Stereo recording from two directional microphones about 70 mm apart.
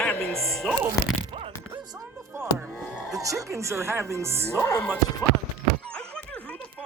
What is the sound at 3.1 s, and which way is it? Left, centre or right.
Speech, right.